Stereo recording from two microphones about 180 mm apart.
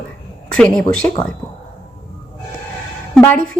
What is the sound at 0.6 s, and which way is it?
Speech, 5° left (ahead or behind).